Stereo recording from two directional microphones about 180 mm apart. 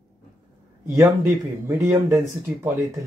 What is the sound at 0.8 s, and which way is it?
Speech, 15° right (ahead or behind).